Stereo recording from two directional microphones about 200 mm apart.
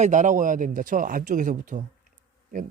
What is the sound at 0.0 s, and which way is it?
Speech, 40° right (ahead or behind).